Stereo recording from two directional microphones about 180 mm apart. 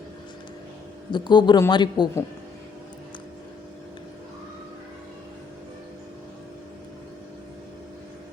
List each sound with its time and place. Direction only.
1.1 s a woman's voice: 25° left (ahead or behind)